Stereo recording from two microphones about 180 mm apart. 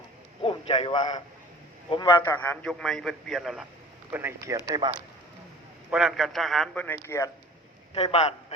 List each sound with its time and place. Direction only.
0.4 s a sound: 30° left (ahead or behind)
1.9 s a man's voice: 25° left (ahead or behind)
2.2 s a man's voice: 10° left (ahead or behind); by 4.9 s 25° right (ahead or behind)
5.9 s a man's voice: 5° right (ahead or behind); by 7.3 s 15° left (ahead or behind)
7.9 s a man's voice: 35° left (ahead or behind)